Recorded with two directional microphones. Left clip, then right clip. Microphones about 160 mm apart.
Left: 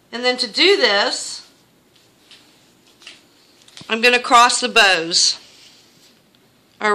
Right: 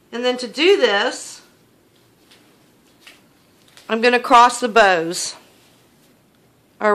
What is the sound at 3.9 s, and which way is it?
Speech, 50° right (ahead or behind).